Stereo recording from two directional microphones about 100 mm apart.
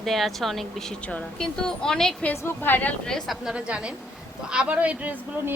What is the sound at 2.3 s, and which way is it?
Speech, 20° left (ahead or behind).